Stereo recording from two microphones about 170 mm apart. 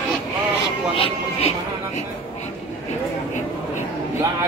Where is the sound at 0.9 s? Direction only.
35° left (ahead or behind).